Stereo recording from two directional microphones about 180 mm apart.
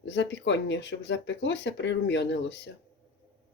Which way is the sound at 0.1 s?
75° left (ahead or behind).